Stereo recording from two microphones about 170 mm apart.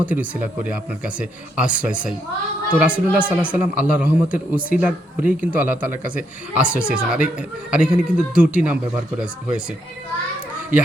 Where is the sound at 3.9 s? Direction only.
5° right (ahead or behind).